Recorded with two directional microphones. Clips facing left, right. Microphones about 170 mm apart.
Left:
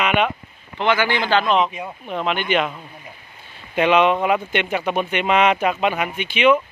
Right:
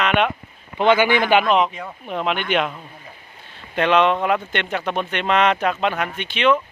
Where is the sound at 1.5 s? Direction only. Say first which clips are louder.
Right 1 dB; centre (ahead or behind).